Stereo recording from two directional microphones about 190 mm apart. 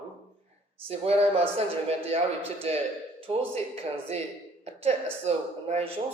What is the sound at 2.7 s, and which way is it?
A woman's voice, 35° right (ahead or behind).